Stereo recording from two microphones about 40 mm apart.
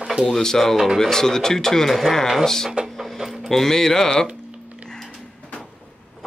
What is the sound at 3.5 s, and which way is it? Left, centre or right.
Speech, centre.